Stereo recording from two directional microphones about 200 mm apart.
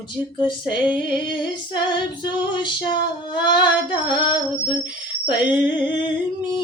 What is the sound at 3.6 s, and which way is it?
Singing, 20° left (ahead or behind).